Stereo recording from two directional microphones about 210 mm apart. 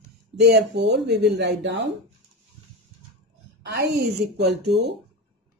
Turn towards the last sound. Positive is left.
turn(degrees=-50)  # may be behind; listen again after turning